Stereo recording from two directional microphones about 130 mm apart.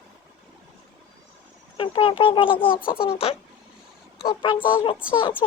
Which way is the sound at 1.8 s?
40° left (ahead or behind).